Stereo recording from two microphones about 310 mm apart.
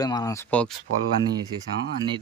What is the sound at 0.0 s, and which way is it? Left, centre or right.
Speech, centre.